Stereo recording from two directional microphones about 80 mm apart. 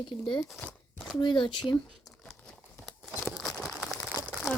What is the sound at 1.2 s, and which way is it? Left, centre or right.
Speech, left.